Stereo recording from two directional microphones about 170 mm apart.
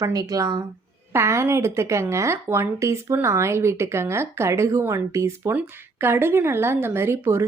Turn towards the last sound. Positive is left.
turn(degrees=-15)  # may be behind; listen again after turning